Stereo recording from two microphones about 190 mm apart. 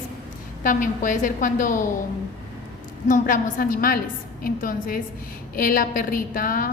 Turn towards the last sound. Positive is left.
turn(degrees=45)  # may be behind; listen again after turning